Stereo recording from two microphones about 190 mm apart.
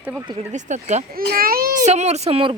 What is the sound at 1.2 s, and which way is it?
A child's voice, 50° right (ahead or behind).